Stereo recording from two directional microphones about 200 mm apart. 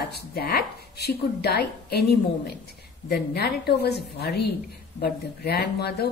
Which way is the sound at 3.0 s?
55° left (ahead or behind).